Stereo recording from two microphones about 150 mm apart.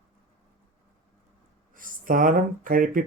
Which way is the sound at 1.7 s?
65° right (ahead or behind).